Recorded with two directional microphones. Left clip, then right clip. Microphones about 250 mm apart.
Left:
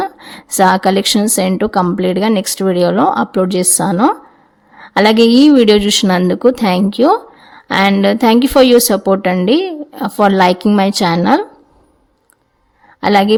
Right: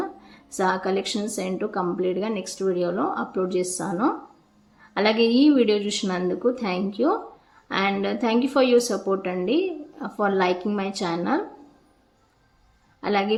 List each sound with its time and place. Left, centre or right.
0.0 s a woman's voice: left
13.0 s a woman's voice: left